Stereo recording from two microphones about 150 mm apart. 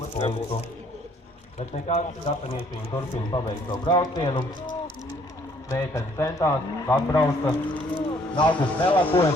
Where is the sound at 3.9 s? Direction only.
30° left (ahead or behind).